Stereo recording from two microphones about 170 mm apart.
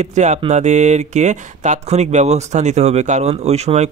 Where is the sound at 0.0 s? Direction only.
45° right (ahead or behind).